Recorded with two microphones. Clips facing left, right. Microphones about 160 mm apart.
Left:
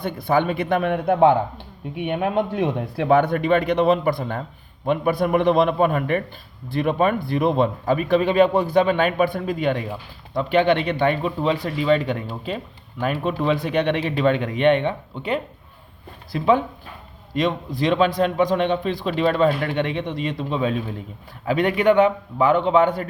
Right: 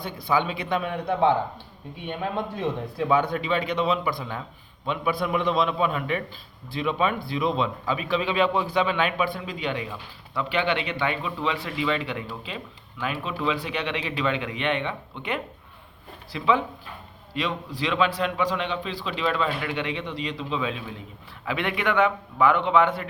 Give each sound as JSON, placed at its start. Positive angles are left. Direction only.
{"t": 0.0, "sound": "a man's voice", "side_deg": 55}